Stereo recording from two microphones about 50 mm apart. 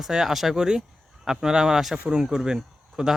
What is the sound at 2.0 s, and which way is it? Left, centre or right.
Speech, centre.